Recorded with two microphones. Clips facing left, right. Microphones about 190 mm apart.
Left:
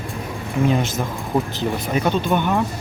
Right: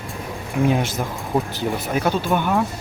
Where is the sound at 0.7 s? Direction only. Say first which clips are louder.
Even; 10° right (ahead or behind).